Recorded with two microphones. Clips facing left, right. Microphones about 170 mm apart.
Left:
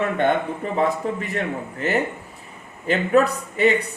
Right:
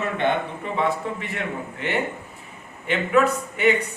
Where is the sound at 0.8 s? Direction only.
40° left (ahead or behind).